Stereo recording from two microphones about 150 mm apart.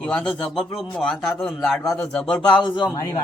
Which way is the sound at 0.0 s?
5° left (ahead or behind).